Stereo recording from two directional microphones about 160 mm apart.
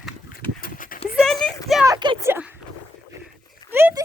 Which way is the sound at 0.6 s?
60° left (ahead or behind).